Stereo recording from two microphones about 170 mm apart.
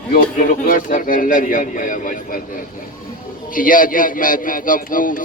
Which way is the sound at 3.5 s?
55° left (ahead or behind).